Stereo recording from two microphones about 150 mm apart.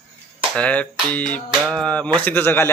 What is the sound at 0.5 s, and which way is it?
Speech, 10° left (ahead or behind).